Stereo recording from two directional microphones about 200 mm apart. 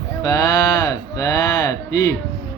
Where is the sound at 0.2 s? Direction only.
20° left (ahead or behind).